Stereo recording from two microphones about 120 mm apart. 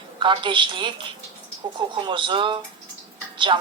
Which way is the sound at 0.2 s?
40° right (ahead or behind).